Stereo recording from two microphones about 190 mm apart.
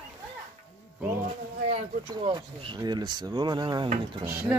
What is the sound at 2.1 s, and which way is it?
Speech, 25° right (ahead or behind).